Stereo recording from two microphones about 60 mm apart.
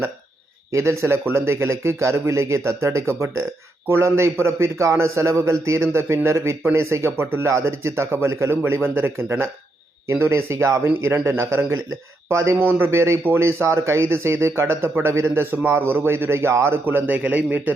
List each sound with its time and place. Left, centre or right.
0.7 s a man's voice: right
12.9 s a man's voice: right
17.1 s speech: right